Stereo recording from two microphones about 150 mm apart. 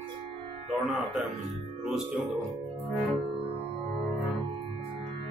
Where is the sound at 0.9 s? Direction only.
5° right (ahead or behind).